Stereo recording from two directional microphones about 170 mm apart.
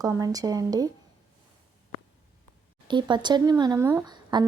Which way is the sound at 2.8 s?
25° right (ahead or behind).